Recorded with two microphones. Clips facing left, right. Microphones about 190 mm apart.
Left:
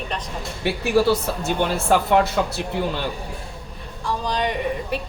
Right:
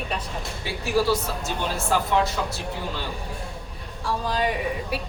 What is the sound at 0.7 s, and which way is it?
Speech, 65° left (ahead or behind).